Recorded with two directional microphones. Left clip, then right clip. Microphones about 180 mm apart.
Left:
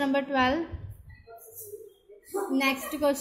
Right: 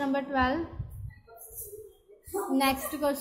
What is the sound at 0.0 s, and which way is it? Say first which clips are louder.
Speech: left 3 dB; 10° left (ahead or behind).